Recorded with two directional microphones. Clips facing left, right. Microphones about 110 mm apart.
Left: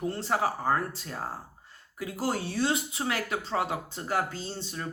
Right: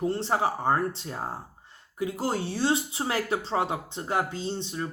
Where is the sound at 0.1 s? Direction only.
25° right (ahead or behind).